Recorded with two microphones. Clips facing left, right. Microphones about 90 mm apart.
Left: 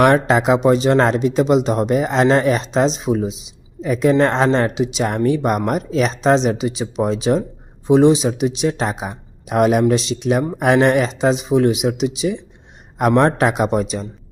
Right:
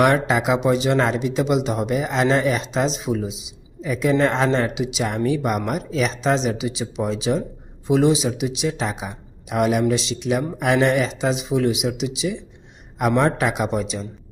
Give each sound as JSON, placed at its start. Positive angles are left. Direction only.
{"t": 0.0, "sound": "speech", "side_deg": 35}